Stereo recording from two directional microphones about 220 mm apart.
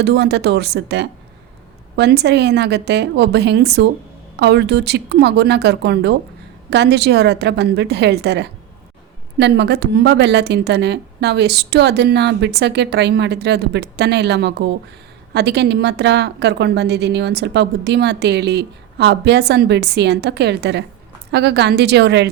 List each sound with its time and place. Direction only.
0.0 s a woman's voice: 50° right (ahead or behind)